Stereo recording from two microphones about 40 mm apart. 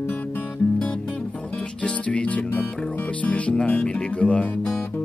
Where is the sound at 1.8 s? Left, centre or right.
Left.